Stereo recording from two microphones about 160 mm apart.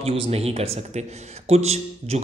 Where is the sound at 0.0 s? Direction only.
35° right (ahead or behind).